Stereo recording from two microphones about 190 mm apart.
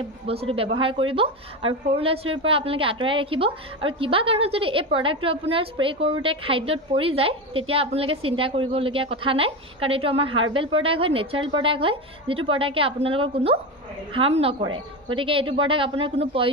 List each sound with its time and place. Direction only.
0.3 s a woman's voice: 30° right (ahead or behind)